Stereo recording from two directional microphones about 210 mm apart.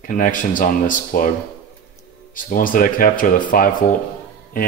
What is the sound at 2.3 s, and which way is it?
Speech, 40° left (ahead or behind).